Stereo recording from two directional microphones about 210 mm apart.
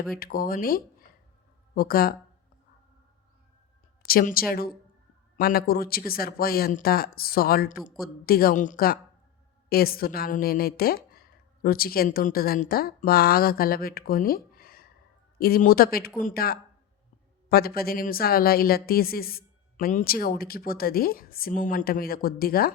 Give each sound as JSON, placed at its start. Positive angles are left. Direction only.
{"t": 0.2, "sound": "a woman's voice", "side_deg": 45}
{"t": 4.0, "sound": "a woman's voice", "side_deg": 45}